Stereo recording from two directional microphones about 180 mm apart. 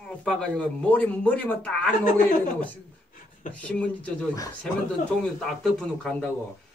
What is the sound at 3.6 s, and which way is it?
Speech, 5° left (ahead or behind).